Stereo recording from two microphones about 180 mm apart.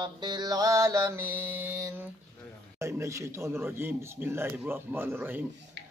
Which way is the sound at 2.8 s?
15° right (ahead or behind).